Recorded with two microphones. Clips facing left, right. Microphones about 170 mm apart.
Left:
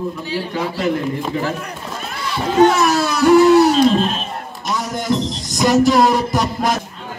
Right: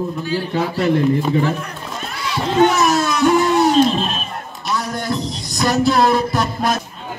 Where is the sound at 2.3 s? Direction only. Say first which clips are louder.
Left 2 dB; 5° left (ahead or behind).